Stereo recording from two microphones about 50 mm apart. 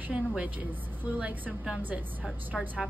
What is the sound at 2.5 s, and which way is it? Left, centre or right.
Speech, centre.